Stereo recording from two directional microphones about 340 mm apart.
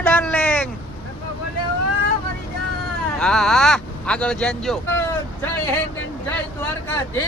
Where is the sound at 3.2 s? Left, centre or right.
Centre.